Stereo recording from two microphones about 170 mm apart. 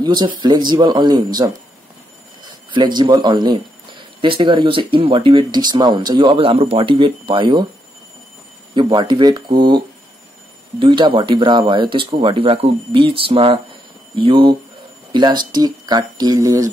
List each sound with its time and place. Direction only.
0.0 s speech: 25° right (ahead or behind)
8.7 s speech: 25° right (ahead or behind)